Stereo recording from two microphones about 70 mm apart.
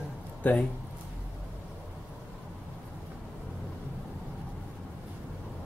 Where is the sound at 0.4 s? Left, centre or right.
Left.